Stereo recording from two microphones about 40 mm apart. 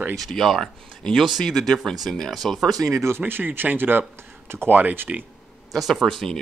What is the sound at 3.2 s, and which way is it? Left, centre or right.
Speech, right.